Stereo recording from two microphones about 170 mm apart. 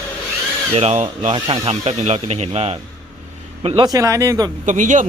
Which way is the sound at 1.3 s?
25° right (ahead or behind).